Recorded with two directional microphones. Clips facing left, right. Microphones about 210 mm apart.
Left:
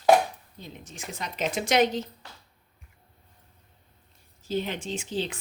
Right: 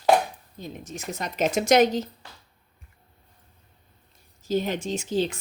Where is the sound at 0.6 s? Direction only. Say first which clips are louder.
Right 6 dB; 40° right (ahead or behind).